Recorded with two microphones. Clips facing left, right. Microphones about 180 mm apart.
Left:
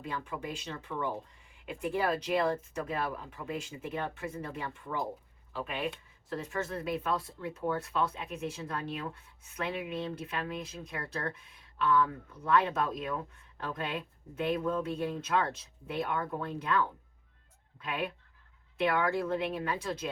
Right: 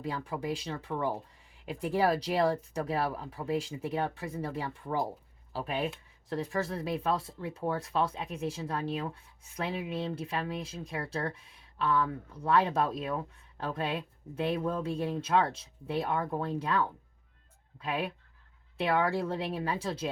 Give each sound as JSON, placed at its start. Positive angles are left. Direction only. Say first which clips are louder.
{"t": 0.0, "sound": "speech", "louder": "right 3 dB", "side_deg": -35}